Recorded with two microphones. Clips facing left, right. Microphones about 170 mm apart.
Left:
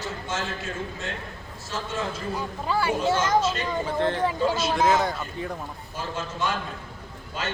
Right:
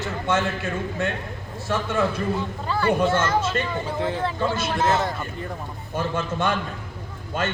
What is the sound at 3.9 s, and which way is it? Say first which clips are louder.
Speech: left 2 dB; 10° right (ahead or behind).